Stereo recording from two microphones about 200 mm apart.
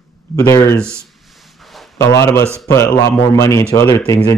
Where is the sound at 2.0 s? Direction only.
15° left (ahead or behind).